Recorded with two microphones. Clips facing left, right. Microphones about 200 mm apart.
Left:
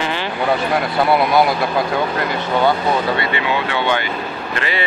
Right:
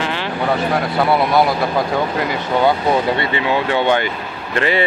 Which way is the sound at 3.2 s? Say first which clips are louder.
Right 2 dB; 35° right (ahead or behind).